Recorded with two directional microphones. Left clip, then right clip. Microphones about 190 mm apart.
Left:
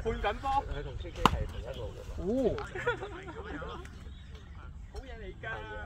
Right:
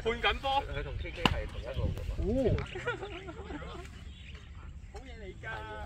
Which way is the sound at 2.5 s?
55° left (ahead or behind).